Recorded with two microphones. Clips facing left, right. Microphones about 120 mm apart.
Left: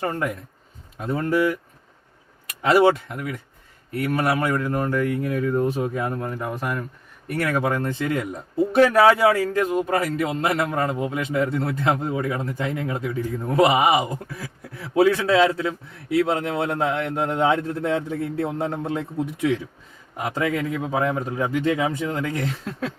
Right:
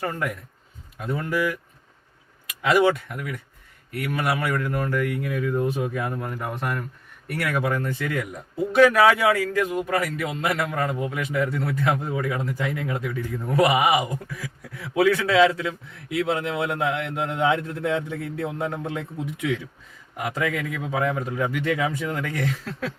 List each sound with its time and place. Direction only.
0.0 s a man's voice: 25° left (ahead or behind)